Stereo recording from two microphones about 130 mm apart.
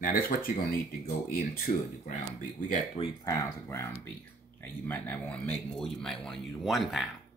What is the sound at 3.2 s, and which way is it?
Speech, 20° left (ahead or behind).